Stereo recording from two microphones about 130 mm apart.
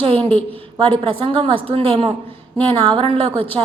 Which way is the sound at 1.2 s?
45° right (ahead or behind).